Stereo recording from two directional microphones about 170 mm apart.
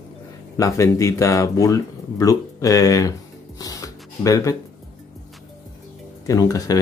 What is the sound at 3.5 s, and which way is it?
Shuffling cards, 20° left (ahead or behind).